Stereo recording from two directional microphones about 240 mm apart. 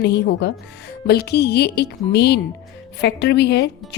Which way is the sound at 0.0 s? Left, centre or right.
Left.